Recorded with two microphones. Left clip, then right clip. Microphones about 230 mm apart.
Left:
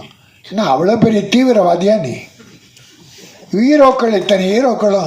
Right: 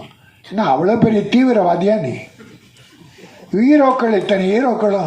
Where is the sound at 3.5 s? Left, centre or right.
Left.